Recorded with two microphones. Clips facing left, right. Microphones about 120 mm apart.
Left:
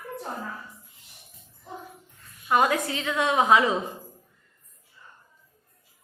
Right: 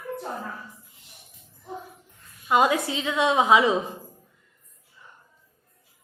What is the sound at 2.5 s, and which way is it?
A woman's voice, 15° right (ahead or behind).